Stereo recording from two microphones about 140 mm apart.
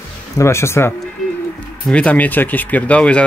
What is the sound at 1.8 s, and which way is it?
Speech, 5° left (ahead or behind).